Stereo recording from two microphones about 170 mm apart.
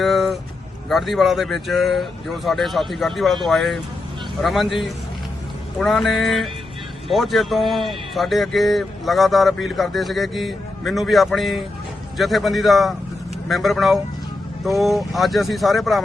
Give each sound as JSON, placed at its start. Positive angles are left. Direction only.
{"t": 0.0, "sound": "vehicle", "side_deg": 0}
{"t": 0.9, "sound": "a man's voice", "side_deg": 0}